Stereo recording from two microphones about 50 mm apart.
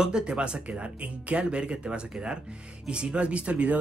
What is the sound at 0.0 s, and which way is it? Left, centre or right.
Speech, centre.